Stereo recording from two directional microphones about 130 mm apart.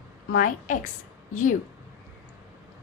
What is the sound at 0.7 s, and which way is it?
Speech, 70° left (ahead or behind).